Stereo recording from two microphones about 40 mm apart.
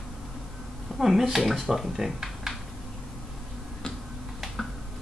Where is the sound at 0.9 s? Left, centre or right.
Centre.